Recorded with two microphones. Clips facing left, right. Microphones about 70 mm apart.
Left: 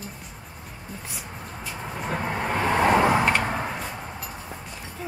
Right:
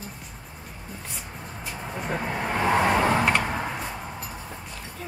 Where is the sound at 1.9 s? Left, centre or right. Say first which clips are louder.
Left 1 dB; centre.